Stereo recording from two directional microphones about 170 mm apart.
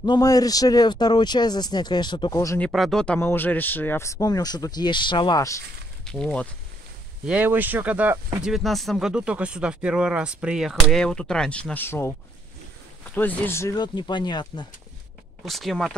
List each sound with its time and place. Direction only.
0.0 s speech: 20° left (ahead or behind)
2.6 s speech: centre (ahead or behind); by 5.6 s 20° left (ahead or behind)
6.0 s speech: 5° left (ahead or behind)
7.2 s speech: 10° right (ahead or behind); by 14.7 s 25° left (ahead or behind)
15.4 s speech: centre (ahead or behind)